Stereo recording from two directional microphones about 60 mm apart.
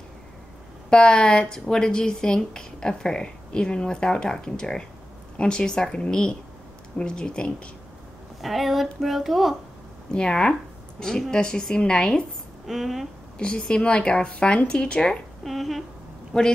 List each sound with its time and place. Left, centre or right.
0.8 s speech: centre
8.4 s a child's voice: centre
10.1 s speech: centre
12.6 s a child's voice: centre
13.4 s speech: centre
15.4 s a child's voice: centre
16.3 s speech: centre